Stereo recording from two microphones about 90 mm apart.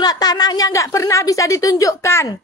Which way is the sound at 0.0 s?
45° left (ahead or behind).